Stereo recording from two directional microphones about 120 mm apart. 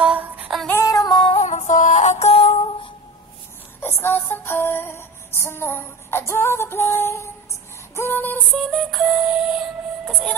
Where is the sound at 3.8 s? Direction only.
20° left (ahead or behind).